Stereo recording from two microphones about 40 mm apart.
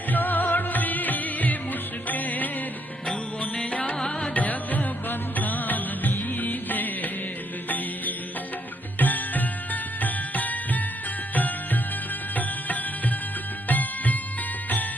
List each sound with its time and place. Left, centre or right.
0.1 s music: left
3.5 s music: left
4.4 s music: left
9.0 s music: left